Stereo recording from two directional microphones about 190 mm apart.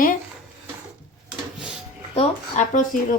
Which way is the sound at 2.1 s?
35° left (ahead or behind).